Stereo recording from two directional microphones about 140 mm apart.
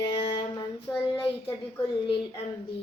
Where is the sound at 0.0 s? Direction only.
40° left (ahead or behind).